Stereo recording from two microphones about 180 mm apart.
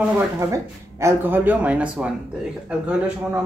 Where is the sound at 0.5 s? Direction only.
15° right (ahead or behind).